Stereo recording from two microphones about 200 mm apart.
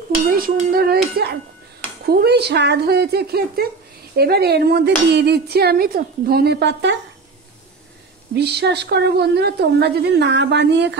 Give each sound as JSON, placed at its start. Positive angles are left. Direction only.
{"t": 0.5, "sound": "speech", "side_deg": -45}
{"t": 8.4, "sound": "a woman's voice", "side_deg": -55}